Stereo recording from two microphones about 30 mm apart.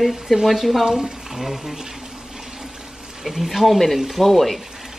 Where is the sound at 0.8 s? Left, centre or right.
Centre.